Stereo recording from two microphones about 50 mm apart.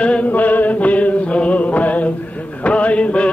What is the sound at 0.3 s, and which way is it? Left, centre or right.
Music, left.